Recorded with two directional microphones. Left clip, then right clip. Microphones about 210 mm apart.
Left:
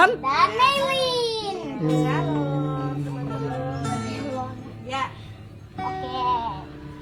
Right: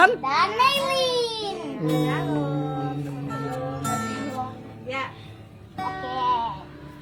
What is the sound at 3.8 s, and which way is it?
Music, 45° right (ahead or behind).